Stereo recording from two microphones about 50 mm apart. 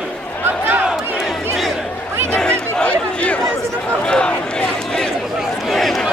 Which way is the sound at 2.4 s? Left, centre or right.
Centre.